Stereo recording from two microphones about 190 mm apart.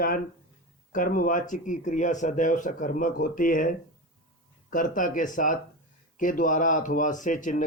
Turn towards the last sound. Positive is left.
turn(degrees=40)  # may be behind; listen again after turning